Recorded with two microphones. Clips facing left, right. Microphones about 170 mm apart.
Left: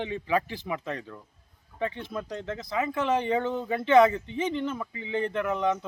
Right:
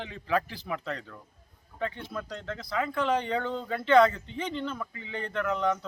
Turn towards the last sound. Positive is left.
turn(degrees=15)  # may be behind; listen again after turning